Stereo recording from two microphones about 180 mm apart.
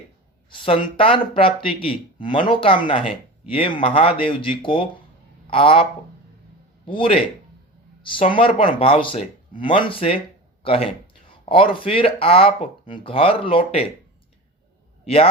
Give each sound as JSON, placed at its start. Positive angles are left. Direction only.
{"t": 0.6, "sound": "speech", "side_deg": 30}
{"t": 15.0, "sound": "a man's voice", "side_deg": 35}